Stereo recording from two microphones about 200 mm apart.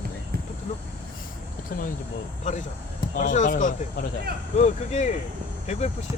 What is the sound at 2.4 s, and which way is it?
Speech, 35° left (ahead or behind).